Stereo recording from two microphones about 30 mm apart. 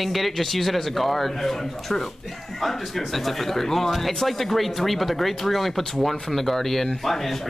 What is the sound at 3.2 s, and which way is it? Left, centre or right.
Speech, centre.